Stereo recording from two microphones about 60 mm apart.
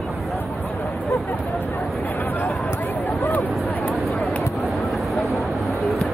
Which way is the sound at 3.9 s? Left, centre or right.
Centre.